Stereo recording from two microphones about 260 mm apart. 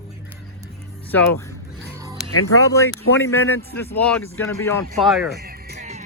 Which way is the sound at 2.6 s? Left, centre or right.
Centre.